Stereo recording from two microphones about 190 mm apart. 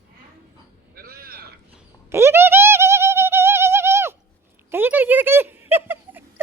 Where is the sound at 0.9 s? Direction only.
50° right (ahead or behind).